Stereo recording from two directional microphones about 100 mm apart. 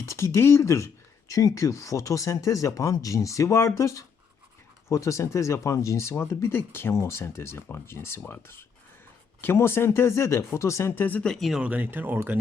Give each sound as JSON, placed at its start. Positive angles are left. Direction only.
{"t": 0.0, "sound": "speech", "side_deg": 30}
{"t": 11.3, "sound": "speech", "side_deg": 0}
{"t": 11.6, "sound": "speech", "side_deg": -15}